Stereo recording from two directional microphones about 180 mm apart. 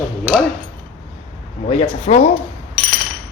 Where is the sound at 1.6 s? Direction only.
35° left (ahead or behind).